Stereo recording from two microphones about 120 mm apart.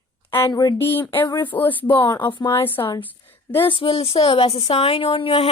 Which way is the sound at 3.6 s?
50° left (ahead or behind).